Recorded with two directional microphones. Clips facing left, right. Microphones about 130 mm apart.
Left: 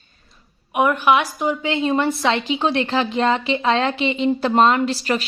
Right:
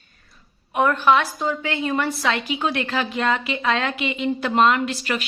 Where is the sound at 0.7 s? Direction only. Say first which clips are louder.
Left 1 dB; 15° left (ahead or behind); by 5.3 s 35° left (ahead or behind).